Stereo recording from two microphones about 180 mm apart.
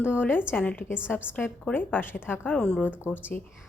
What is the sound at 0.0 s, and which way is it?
A woman's voice, 10° left (ahead or behind).